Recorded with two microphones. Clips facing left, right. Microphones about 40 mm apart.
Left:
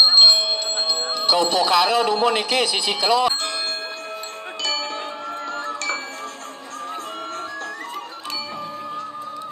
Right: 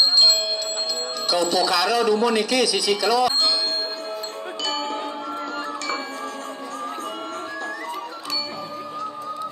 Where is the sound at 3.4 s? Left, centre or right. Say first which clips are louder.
Right 3 dB; left.